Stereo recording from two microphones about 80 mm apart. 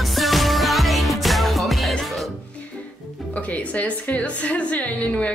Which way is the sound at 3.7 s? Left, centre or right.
Centre.